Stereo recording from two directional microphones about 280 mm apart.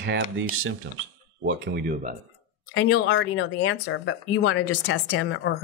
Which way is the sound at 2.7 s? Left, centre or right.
Left.